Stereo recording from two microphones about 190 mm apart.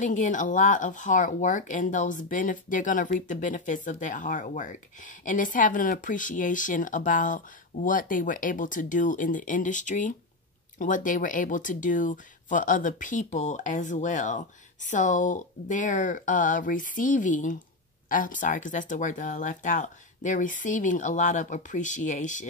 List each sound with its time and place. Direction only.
0.0 s speech: 40° left (ahead or behind)